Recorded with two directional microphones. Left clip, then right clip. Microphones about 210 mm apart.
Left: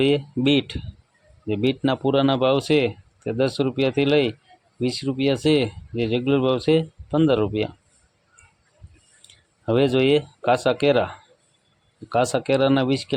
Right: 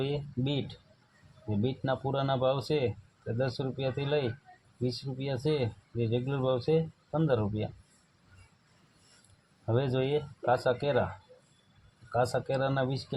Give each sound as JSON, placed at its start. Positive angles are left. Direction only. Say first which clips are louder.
{"t": 0.0, "sound": "speech", "louder": "left 14 dB", "side_deg": 30}
{"t": 9.6, "sound": "speech", "louder": "left 12 dB", "side_deg": 35}
{"t": 12.1, "sound": "speech", "louder": "left 9 dB", "side_deg": 30}